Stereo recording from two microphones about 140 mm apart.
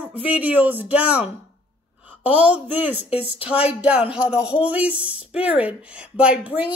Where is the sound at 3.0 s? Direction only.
45° left (ahead or behind).